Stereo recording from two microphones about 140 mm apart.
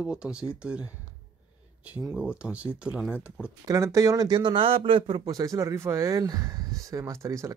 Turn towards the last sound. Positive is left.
turn(degrees=-20)  # may be behind; listen again after turning